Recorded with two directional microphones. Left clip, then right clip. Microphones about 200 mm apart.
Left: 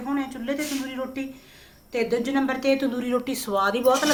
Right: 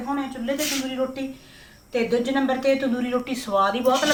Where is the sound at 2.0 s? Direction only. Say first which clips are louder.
Right 3 dB; 20° left (ahead or behind).